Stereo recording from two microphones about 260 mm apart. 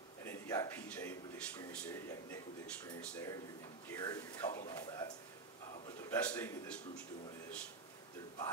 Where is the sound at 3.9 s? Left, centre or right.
Centre.